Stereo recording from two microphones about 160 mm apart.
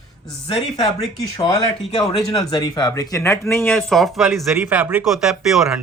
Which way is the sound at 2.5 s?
25° left (ahead or behind).